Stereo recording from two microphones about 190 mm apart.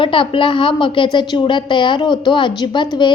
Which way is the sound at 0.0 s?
25° left (ahead or behind).